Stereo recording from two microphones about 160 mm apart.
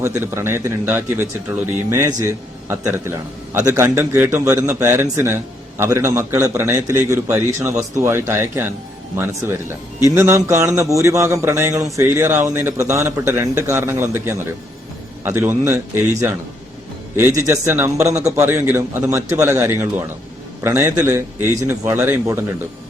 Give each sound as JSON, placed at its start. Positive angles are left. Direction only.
{"t": 0.0, "sound": "speech", "side_deg": -15}
{"t": 11.7, "sound": "a man's voice", "side_deg": 0}
{"t": 11.9, "sound": "speech", "side_deg": -15}
{"t": 17.2, "sound": "speech", "side_deg": -15}